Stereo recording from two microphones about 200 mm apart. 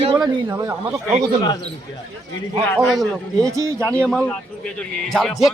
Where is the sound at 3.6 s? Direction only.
15° right (ahead or behind).